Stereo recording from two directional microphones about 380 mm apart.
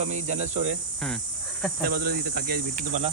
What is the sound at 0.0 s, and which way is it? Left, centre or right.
Speech, centre.